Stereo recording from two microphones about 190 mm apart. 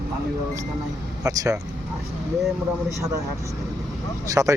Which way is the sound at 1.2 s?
15° right (ahead or behind).